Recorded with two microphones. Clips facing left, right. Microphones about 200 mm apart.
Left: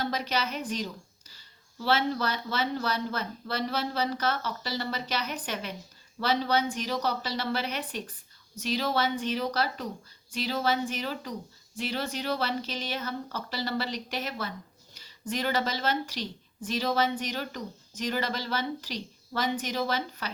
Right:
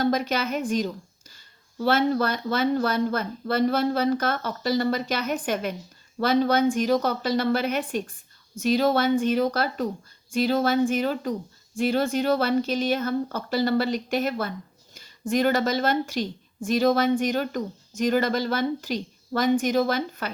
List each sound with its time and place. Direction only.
0.0 s a woman's voice: 50° right (ahead or behind)